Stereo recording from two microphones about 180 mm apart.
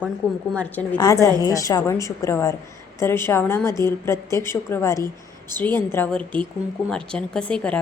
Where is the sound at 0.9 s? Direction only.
20° left (ahead or behind).